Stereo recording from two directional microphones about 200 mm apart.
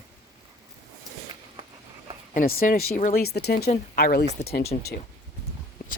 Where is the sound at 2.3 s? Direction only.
45° left (ahead or behind).